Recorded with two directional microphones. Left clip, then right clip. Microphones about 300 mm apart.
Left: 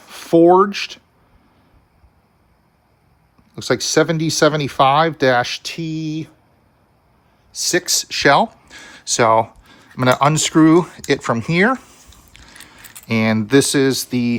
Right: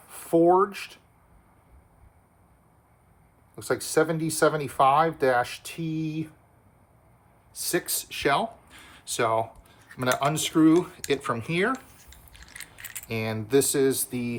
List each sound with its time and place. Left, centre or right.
0.0 s speech: left
3.5 s speech: left
7.5 s speech: left
13.1 s speech: left